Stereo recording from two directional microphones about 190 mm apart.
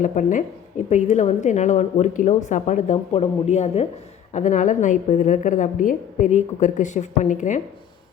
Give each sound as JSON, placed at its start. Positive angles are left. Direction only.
{"t": 0.0, "sound": "a woman's voice", "side_deg": 40}